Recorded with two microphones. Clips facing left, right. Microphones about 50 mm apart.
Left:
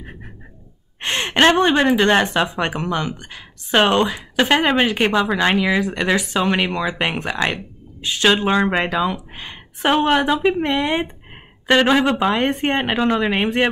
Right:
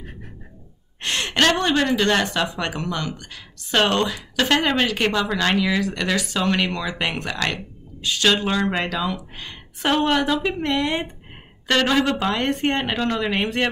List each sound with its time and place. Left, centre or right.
1.0 s a woman's voice: left